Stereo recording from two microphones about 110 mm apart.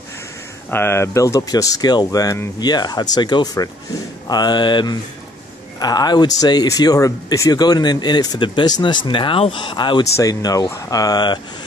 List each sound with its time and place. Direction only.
0.7 s speech: 20° left (ahead or behind)
2.6 s speech: 40° left (ahead or behind)
10.1 s speech: 30° left (ahead or behind)